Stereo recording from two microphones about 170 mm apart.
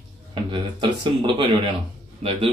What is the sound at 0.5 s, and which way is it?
A man's voice, 25° right (ahead or behind).